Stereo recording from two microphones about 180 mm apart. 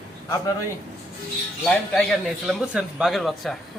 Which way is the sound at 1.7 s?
5° left (ahead or behind).